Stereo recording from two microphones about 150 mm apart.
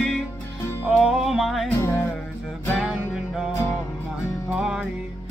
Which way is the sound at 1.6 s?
20° left (ahead or behind).